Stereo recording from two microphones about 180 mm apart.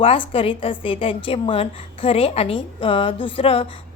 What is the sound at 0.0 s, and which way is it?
A woman's voice, 30° left (ahead or behind).